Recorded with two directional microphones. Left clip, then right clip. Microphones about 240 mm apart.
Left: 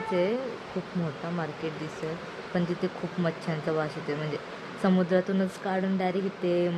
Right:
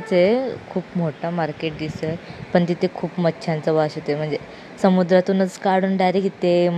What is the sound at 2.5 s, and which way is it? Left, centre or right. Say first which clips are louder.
A woman's voice: right 11 dB; right.